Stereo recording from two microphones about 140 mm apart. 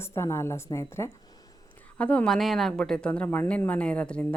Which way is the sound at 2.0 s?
10° left (ahead or behind).